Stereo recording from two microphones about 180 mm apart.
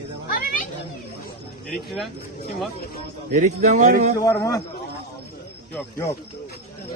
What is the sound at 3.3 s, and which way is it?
Speech, 45° right (ahead or behind).